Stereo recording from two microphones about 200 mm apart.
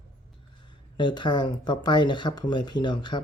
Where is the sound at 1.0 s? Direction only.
20° left (ahead or behind).